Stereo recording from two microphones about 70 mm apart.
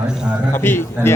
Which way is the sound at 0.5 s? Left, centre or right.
Left.